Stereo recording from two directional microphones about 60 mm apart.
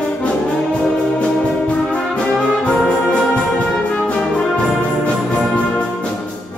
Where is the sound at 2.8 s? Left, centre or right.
Centre.